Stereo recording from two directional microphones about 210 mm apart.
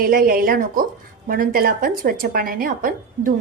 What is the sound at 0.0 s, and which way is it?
A woman's voice, 40° right (ahead or behind).